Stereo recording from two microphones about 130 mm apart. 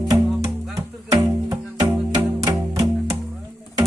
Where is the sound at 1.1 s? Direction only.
25° right (ahead or behind).